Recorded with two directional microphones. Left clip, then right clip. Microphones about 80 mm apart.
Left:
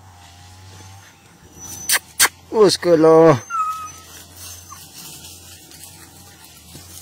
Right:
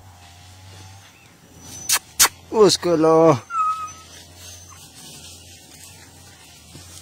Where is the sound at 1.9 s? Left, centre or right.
Left.